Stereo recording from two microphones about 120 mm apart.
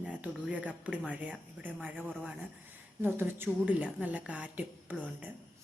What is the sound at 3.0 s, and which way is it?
Speech, 15° right (ahead or behind).